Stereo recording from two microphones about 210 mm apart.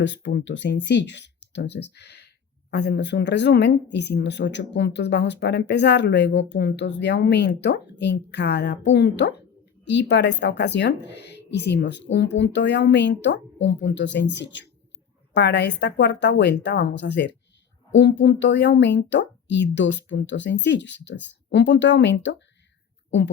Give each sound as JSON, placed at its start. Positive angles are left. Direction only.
{"t": 0.0, "sound": "speech", "side_deg": 60}